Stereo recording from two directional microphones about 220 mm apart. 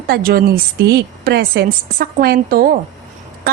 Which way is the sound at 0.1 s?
40° right (ahead or behind).